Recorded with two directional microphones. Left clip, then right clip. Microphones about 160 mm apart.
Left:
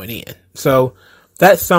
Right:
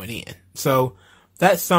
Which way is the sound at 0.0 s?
20° left (ahead or behind).